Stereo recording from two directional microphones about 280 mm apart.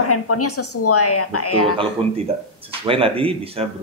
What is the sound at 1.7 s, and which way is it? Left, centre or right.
Speech, centre.